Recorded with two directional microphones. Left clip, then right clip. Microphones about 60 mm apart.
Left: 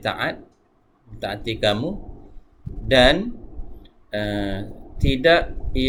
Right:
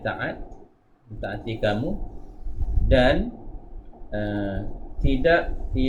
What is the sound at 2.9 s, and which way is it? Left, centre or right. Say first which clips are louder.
Speech: left 4 dB; left.